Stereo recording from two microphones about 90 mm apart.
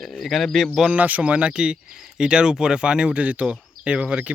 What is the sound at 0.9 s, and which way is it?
Speech, 15° right (ahead or behind).